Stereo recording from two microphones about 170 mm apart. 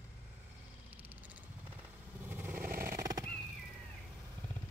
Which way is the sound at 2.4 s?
55° right (ahead or behind).